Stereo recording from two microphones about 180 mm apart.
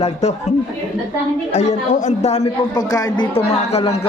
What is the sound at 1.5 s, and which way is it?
Speech, 40° left (ahead or behind).